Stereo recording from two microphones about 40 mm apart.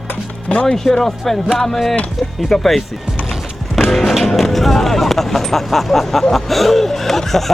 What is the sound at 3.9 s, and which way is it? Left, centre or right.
Speech, centre.